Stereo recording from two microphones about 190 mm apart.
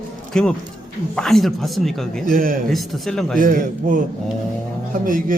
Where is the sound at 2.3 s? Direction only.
50° right (ahead or behind).